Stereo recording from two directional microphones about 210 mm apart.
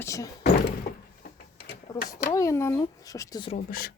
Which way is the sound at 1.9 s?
15° left (ahead or behind).